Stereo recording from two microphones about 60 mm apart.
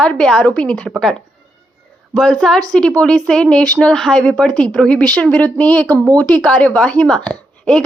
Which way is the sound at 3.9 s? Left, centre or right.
Centre.